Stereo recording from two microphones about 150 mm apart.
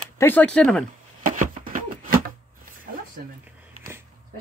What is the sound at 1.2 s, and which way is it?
Chopping, 65° right (ahead or behind).